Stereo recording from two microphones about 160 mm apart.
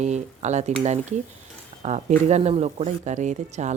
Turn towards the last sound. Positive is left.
turn(degrees=-45)  # may be behind; listen again after turning